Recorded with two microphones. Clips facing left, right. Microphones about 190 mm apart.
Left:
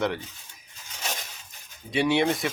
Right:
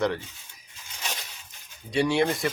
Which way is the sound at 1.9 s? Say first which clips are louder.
Even; centre (ahead or behind).